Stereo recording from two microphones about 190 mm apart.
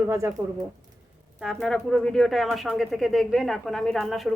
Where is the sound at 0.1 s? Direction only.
15° right (ahead or behind).